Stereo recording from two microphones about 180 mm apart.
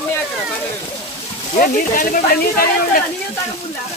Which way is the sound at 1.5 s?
50° left (ahead or behind).